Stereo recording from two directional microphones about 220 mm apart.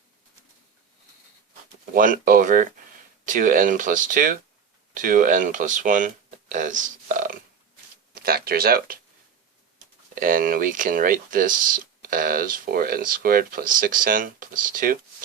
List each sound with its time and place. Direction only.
1.9 s speech: 40° right (ahead or behind)
10.2 s speech: 40° right (ahead or behind)